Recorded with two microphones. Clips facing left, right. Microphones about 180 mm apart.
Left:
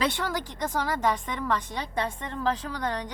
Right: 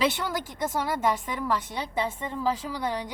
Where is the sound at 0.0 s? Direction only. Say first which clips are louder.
Right 1 dB; 5° right (ahead or behind).